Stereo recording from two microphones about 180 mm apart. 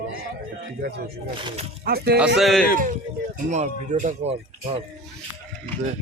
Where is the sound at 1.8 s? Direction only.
60° right (ahead or behind).